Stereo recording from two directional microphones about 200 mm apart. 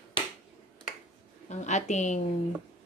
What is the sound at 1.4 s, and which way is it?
Speech, 35° left (ahead or behind).